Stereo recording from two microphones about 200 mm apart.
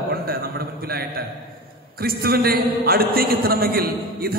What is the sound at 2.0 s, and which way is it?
A man's voice, 50° right (ahead or behind).